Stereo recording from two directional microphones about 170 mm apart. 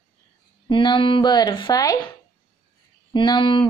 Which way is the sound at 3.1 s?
25° left (ahead or behind).